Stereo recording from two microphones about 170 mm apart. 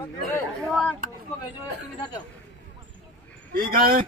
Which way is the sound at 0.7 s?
Centre (ahead or behind).